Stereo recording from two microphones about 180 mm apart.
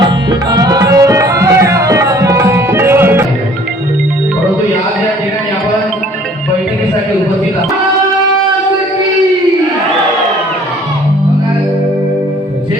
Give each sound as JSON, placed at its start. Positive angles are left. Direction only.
{"t": 0.0, "sound": "tabla", "side_deg": -20}